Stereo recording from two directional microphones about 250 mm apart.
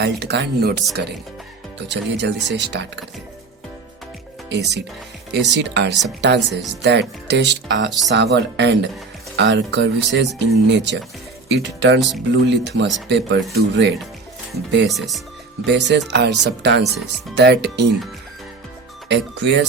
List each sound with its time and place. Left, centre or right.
0.0 s speech: right
1.9 s speech: right
4.4 s speech: right
14.8 s speech: centre
15.6 s speech: right
19.0 s speech: right